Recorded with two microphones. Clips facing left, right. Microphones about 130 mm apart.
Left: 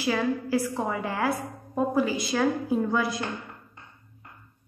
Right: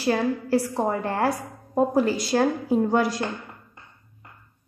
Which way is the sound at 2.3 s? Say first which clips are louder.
Right 3 dB; 40° right (ahead or behind).